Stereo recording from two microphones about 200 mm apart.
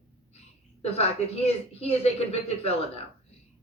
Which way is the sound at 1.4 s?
30° left (ahead or behind).